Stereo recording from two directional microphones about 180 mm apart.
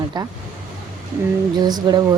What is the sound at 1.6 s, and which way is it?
Speech, 20° right (ahead or behind).